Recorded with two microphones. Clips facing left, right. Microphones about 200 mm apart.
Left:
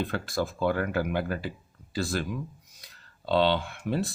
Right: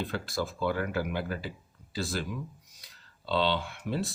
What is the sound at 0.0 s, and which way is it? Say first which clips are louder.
Speech: left 3 dB; 50° left (ahead or behind).